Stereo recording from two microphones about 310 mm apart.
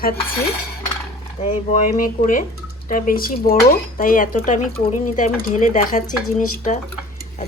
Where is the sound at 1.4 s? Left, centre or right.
Left.